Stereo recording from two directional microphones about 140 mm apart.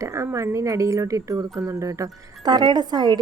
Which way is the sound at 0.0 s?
20° right (ahead or behind).